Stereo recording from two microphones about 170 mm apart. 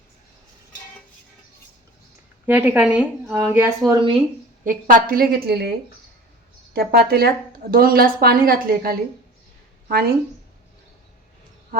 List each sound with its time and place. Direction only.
2.5 s a woman's voice: 10° right (ahead or behind)
4.6 s speech: 50° right (ahead or behind)
6.7 s speech: 70° right (ahead or behind)
11.7 s speech: 60° right (ahead or behind)